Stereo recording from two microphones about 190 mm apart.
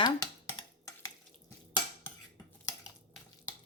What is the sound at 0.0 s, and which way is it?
Dishes, 15° left (ahead or behind).